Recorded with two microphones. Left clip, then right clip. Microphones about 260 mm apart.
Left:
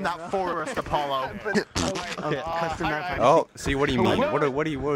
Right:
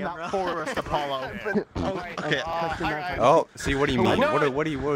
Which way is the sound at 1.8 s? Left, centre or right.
Left.